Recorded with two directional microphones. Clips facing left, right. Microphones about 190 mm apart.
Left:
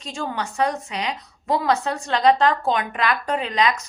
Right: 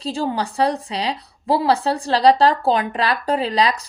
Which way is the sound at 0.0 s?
30° right (ahead or behind).